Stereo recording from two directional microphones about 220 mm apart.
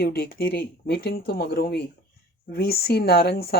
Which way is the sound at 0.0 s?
45° left (ahead or behind).